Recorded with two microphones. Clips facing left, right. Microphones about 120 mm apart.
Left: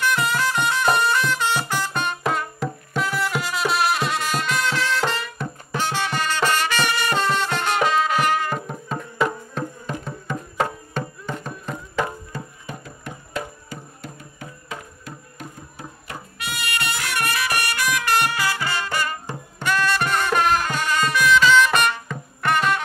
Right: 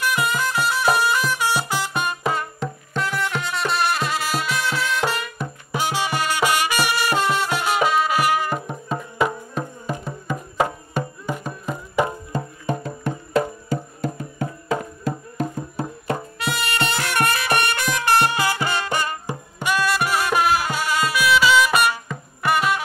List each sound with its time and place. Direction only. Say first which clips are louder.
0.0 s music: left 1 dB; 5° right (ahead or behind)
13.4 s music: right 11 dB; 40° right (ahead or behind); by 22.8 s 5° right (ahead or behind)